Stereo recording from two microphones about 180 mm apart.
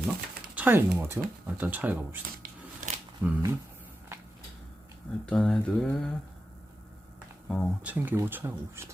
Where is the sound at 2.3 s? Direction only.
45° right (ahead or behind).